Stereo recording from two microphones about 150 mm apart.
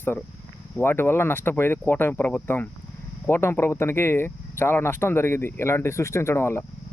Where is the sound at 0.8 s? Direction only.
15° left (ahead or behind).